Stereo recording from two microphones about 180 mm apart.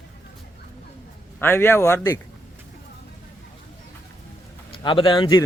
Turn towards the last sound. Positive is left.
turn(degrees=25)  # may be behind; listen again after turning